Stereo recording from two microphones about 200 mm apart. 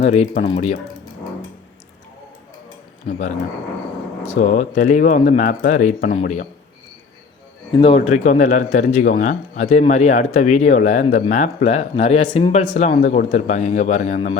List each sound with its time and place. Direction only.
0.0 s a man's voice: 35° left (ahead or behind)
3.1 s a man's voice: 40° left (ahead or behind)
4.4 s a man's voice: 40° left (ahead or behind)
7.8 s a man's voice: 30° left (ahead or behind)